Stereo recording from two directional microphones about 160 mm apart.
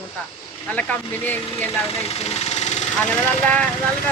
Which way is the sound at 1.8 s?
40° left (ahead or behind).